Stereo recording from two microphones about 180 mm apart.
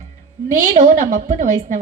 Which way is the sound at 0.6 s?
45° right (ahead or behind).